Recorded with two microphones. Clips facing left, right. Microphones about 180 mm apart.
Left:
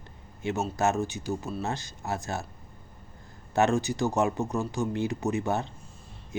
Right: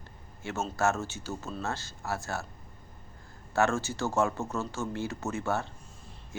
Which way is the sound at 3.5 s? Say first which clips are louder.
Left 3 dB; 20° left (ahead or behind).